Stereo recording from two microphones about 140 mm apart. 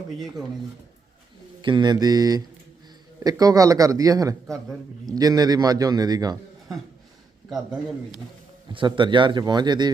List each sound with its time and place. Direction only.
1.6 s a man's voice: 30° right (ahead or behind)
7.5 s a man's voice: 5° right (ahead or behind)
8.7 s a man's voice: 35° right (ahead or behind)